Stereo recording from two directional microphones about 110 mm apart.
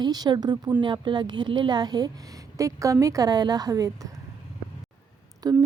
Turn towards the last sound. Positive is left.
turn(degrees=-35)  # may be behind; listen again after turning